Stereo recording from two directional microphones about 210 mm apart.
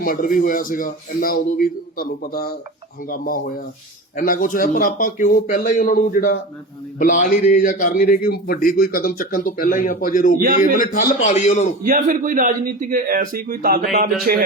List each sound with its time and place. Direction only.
0.0 s a man's voice: 40° left (ahead or behind)
11.8 s a man's voice: 35° right (ahead or behind)